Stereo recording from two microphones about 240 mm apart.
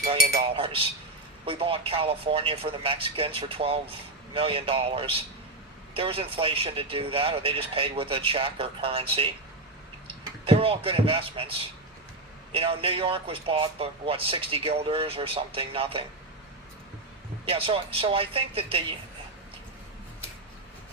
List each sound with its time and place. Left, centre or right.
0.3 s a man's voice: right
12.5 s a man's voice: right
17.4 s a man's voice: right